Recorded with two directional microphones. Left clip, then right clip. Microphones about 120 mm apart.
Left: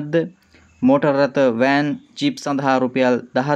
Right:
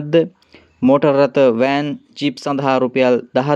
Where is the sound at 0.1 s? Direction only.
35° right (ahead or behind).